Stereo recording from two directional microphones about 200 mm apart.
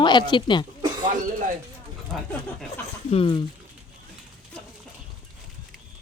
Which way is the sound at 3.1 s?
25° left (ahead or behind).